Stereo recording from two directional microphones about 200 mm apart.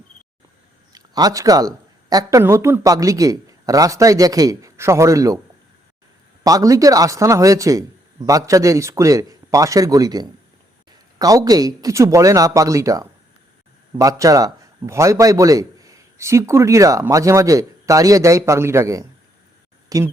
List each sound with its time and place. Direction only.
0.9 s a man's voice: 20° right (ahead or behind)
6.4 s a man's voice: 15° right (ahead or behind)